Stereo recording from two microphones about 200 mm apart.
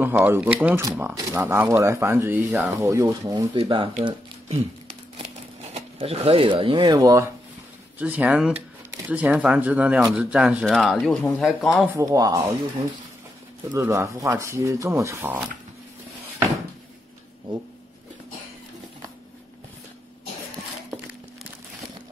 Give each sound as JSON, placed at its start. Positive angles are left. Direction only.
{"t": 0.0, "sound": "speech", "side_deg": -10}
{"t": 5.2, "sound": "a sound", "side_deg": -30}
{"t": 8.0, "sound": "speech", "side_deg": -5}
{"t": 12.0, "sound": "speech", "side_deg": -20}
{"t": 13.7, "sound": "speech", "side_deg": -15}